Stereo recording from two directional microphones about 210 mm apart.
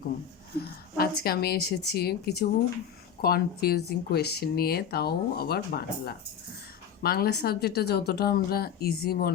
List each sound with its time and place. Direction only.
0.9 s speech: 45° left (ahead or behind)